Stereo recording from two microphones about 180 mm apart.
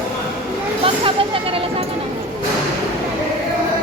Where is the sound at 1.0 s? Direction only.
30° right (ahead or behind).